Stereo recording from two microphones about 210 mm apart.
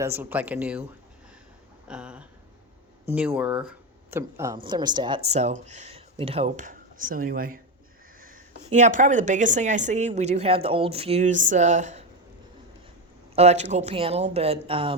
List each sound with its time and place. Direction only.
0.0 s speech: 10° right (ahead or behind)
1.9 s a sound: 5° right (ahead or behind)
3.1 s a woman's voice: 5° right (ahead or behind); by 12.0 s 35° right (ahead or behind)
13.3 s speech: 30° right (ahead or behind)